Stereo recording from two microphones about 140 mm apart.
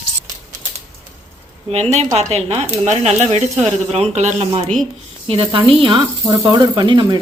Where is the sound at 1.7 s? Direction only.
50° right (ahead or behind).